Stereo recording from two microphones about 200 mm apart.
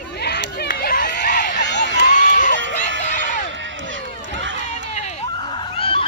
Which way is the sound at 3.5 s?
70° right (ahead or behind).